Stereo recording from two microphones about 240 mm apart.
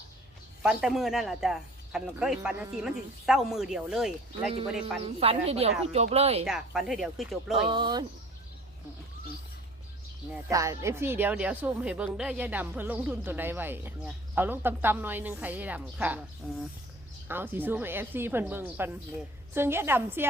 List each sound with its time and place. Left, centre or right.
0.6 s speech: centre
5.0 s speech: right
6.4 s speech: centre
7.5 s speech: right
10.5 s speech: centre
17.2 s speech: centre